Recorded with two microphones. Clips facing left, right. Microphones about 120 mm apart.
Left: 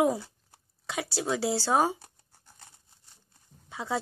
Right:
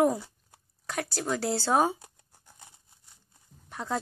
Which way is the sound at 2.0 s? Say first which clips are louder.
Right 2 dB; 15° right (ahead or behind).